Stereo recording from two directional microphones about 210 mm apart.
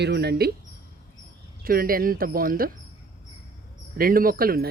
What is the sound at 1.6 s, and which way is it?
Speech, 45° right (ahead or behind).